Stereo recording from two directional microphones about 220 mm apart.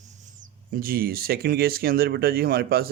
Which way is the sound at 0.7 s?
40° right (ahead or behind).